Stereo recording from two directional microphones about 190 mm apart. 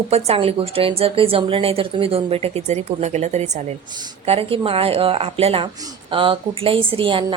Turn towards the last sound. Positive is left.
turn(degrees=-25)  # may be behind; listen again after turning